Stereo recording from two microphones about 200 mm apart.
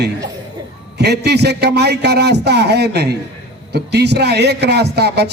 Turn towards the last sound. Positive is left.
turn(degrees=-55)  # may be behind; listen again after turning